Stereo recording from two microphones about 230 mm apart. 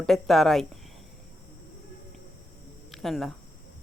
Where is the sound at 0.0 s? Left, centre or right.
Centre.